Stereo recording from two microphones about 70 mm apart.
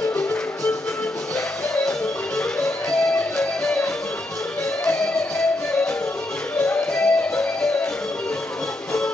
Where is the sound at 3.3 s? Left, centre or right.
Centre.